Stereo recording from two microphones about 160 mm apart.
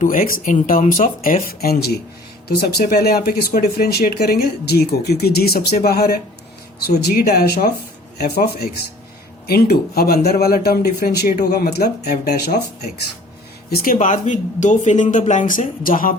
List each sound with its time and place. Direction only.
0.0 s speech: 60° left (ahead or behind); by 11.9 s 75° left (ahead or behind)
12.0 s speech: 55° left (ahead or behind)
13.7 s speech: 60° left (ahead or behind)